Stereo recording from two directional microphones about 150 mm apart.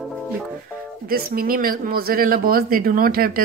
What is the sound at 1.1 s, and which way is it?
Speech, 75° right (ahead or behind).